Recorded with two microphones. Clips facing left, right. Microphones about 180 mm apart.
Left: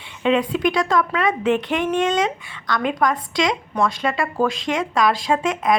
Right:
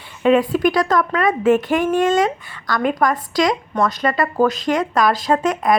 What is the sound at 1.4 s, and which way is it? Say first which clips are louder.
Speech: right 7 dB; 45° right (ahead or behind).